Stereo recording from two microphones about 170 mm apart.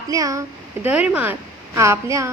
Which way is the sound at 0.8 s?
10° right (ahead or behind).